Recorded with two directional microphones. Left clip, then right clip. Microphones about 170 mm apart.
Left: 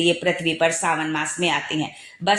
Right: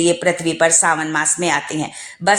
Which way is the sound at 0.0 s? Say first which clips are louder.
Right 4 dB; 25° right (ahead or behind).